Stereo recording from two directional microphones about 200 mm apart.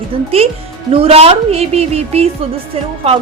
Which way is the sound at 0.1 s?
25° right (ahead or behind).